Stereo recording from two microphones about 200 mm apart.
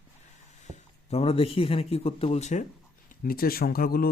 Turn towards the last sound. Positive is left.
turn(degrees=45)  # may be behind; listen again after turning